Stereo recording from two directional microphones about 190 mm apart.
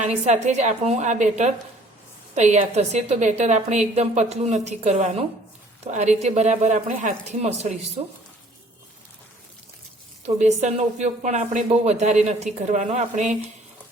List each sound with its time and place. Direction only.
0.0 s speech: 35° right (ahead or behind)
10.2 s speech: 35° right (ahead or behind)